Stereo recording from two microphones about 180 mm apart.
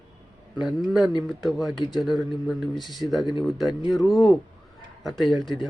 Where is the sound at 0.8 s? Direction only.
Centre (ahead or behind).